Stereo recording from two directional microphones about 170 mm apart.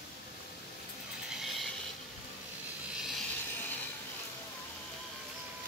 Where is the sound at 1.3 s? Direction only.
Centre (ahead or behind).